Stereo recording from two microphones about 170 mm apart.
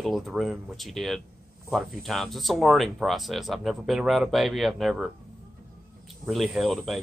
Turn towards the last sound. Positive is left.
turn(degrees=0)  # may be behind; listen again after turning